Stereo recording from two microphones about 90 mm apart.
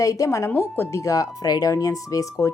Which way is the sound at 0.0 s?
40° left (ahead or behind).